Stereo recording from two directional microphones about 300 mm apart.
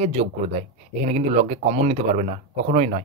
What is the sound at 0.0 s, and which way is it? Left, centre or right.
Speech, right.